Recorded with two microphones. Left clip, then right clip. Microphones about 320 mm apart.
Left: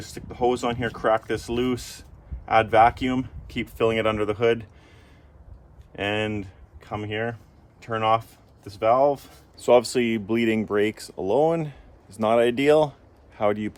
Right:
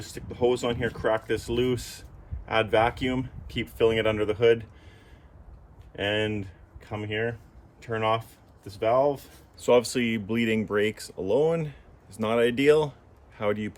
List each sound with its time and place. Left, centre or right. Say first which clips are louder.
0.0 s speech: left 2 dB; centre
6.0 s speech: left 1 dB; left